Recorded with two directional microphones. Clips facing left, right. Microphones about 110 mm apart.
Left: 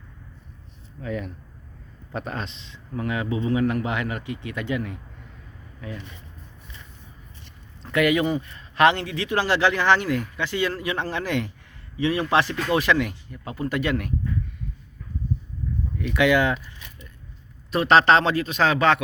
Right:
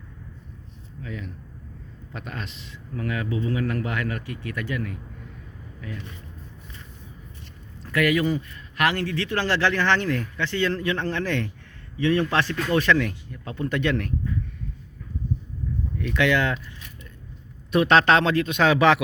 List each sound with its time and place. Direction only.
1.0 s speech: 45° left (ahead or behind)
2.1 s speech: 35° left (ahead or behind)
7.8 s a man's voice: 25° left (ahead or behind); by 14.1 s 5° left (ahead or behind)
16.0 s a man's voice: 10° left (ahead or behind)
17.7 s speech: centre (ahead or behind)